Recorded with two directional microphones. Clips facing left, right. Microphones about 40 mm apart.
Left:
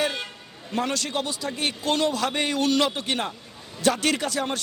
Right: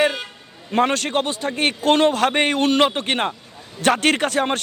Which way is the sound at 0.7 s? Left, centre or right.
Right.